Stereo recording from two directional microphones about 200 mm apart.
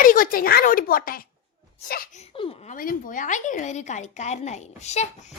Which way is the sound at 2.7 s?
45° left (ahead or behind).